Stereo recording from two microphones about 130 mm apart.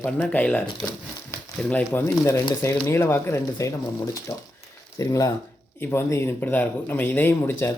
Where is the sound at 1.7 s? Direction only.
15° left (ahead or behind).